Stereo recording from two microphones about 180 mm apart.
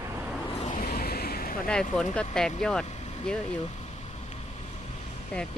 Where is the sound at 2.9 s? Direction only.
40° left (ahead or behind).